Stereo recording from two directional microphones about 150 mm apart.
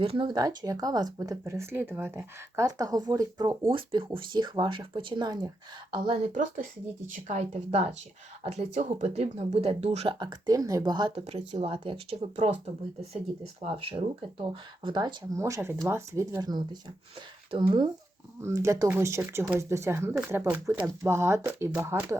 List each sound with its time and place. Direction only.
0.0 s speech: 35° right (ahead or behind)
3.7 s speech: 35° right (ahead or behind)
7.1 s speech: 50° right (ahead or behind)
10.2 s speech: 30° right (ahead or behind)
11.1 s speech: 40° right (ahead or behind)
13.6 s speech: 40° right (ahead or behind)
18.4 s speech: 20° right (ahead or behind)